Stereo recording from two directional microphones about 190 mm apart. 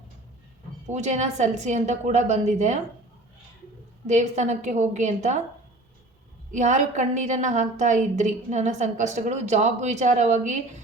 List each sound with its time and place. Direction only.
0.9 s a woman's voice: 35° right (ahead or behind)
4.0 s a woman's voice: 35° right (ahead or behind)
6.5 s a woman's voice: 40° right (ahead or behind)